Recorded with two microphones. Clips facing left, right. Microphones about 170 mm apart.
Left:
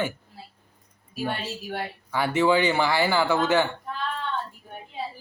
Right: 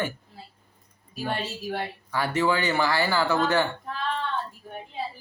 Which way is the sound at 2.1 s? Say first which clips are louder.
Left 3 dB; 15° left (ahead or behind).